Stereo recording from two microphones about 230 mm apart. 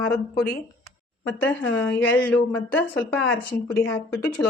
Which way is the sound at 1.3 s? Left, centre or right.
Centre.